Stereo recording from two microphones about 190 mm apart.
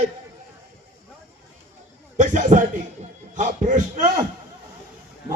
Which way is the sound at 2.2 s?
40° right (ahead or behind).